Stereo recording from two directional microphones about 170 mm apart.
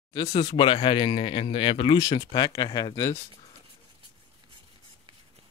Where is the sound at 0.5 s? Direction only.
30° left (ahead or behind).